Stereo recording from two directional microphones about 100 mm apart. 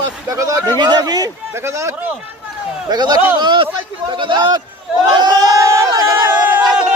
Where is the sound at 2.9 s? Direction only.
45° right (ahead or behind).